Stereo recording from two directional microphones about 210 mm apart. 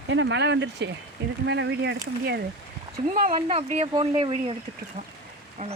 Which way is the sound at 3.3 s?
25° right (ahead or behind).